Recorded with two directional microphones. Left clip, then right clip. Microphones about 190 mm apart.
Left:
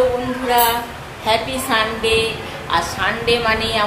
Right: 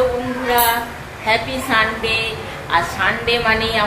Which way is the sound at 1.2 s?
20° left (ahead or behind).